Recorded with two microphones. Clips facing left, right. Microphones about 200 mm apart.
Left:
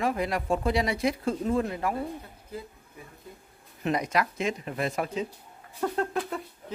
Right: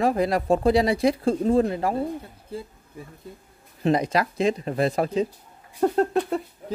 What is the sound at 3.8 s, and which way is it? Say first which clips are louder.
Speech: right 5 dB; 30° right (ahead or behind).